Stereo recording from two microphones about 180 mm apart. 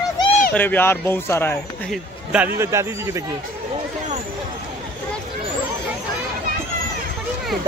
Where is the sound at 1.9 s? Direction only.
10° right (ahead or behind).